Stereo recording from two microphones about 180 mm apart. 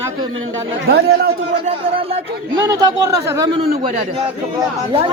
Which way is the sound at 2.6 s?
20° right (ahead or behind).